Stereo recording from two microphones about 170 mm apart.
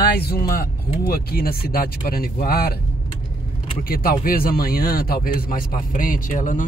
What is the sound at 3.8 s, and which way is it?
Speech, 60° left (ahead or behind).